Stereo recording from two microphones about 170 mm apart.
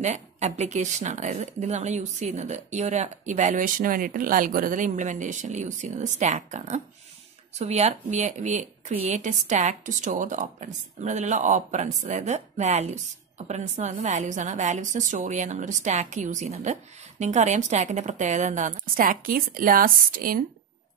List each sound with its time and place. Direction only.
0.0 s a woman's voice: 40° right (ahead or behind); by 20.4 s 60° right (ahead or behind)